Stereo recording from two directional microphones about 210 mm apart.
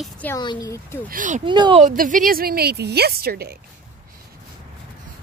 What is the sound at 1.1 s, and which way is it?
Speech, 40° right (ahead or behind).